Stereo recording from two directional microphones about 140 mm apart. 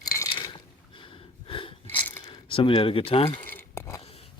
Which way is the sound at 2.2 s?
40° left (ahead or behind).